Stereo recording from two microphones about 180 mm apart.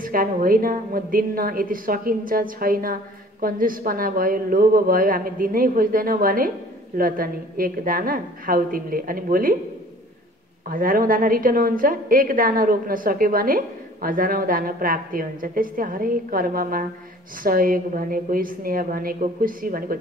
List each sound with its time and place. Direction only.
0.0 s a woman's voice: 50° right (ahead or behind)
10.7 s a woman's voice: 50° right (ahead or behind)